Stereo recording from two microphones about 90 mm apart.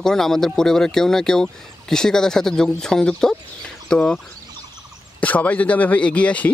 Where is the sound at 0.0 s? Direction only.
5° left (ahead or behind).